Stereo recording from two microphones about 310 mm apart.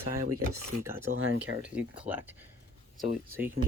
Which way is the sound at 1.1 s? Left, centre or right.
Right.